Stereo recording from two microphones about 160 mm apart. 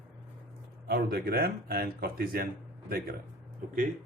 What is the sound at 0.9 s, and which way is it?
Speech, 75° right (ahead or behind).